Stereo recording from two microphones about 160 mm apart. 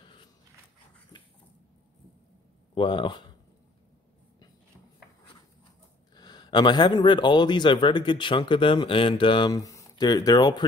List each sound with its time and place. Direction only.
2.7 s speech: 30° left (ahead or behind)
6.1 s speech: 25° left (ahead or behind)